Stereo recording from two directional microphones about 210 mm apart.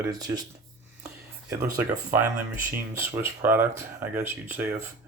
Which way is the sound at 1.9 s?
5° right (ahead or behind).